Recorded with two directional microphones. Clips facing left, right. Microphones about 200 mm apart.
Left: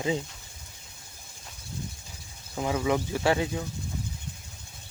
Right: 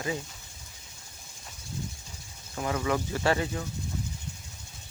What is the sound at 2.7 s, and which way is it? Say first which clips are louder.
Speech: left 2 dB; 10° left (ahead or behind).